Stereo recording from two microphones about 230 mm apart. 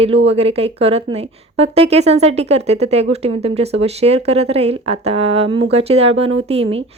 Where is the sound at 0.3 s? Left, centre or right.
Right.